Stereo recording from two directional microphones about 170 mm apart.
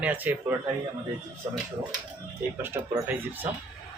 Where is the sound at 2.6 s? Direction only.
15° right (ahead or behind).